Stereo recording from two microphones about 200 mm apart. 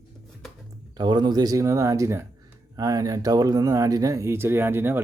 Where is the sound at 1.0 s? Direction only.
20° right (ahead or behind).